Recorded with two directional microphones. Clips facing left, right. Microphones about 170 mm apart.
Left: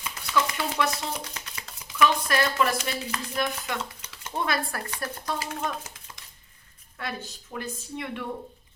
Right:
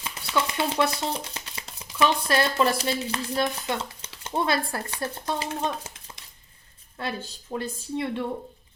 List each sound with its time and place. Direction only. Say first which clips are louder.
0.0 s speech: even; 30° right (ahead or behind)
7.0 s speech: right 3 dB; 30° right (ahead or behind)